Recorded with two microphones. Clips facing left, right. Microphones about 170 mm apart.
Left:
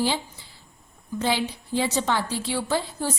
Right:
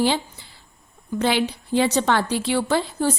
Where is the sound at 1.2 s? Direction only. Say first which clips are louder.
Right 4 dB; 70° right (ahead or behind).